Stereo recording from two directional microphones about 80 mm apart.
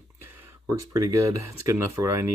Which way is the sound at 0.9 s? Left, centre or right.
Right.